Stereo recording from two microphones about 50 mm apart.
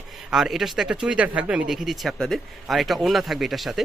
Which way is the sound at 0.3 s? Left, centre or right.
Centre.